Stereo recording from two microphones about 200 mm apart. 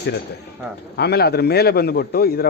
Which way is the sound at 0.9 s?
55° left (ahead or behind).